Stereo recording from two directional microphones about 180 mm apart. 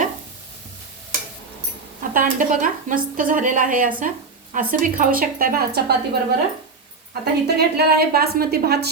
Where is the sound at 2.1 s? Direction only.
50° right (ahead or behind).